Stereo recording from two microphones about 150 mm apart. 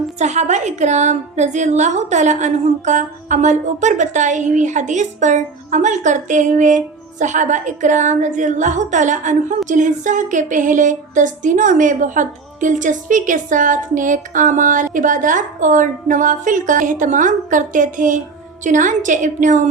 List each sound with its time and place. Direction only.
0.2 s a woman's voice: 50° right (ahead or behind)